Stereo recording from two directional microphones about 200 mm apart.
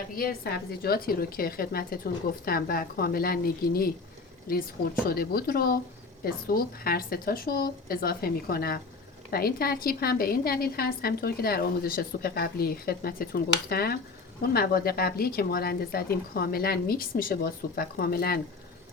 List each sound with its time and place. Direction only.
0.2 s a woman's voice: 50° left (ahead or behind)